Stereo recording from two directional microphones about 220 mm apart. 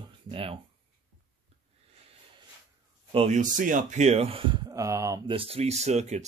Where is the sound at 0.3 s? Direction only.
25° right (ahead or behind).